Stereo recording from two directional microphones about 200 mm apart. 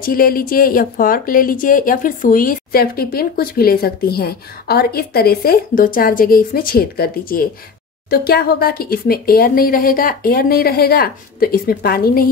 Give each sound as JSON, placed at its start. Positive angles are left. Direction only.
{"t": 0.0, "sound": "speech", "side_deg": 45}